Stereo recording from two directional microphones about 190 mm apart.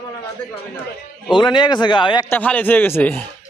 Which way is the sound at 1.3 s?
25° left (ahead or behind).